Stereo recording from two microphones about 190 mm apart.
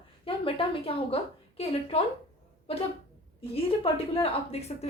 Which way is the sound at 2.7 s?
30° left (ahead or behind).